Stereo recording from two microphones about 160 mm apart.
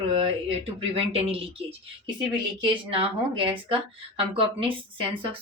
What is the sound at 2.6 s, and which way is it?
A woman's voice, 35° right (ahead or behind).